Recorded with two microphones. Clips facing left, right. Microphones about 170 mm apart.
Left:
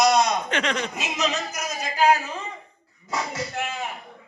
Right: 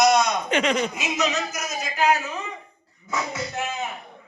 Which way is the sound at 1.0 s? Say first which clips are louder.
Right 2 dB; 35° left (ahead or behind).